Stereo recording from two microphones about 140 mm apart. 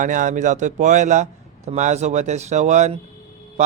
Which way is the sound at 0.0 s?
65° right (ahead or behind).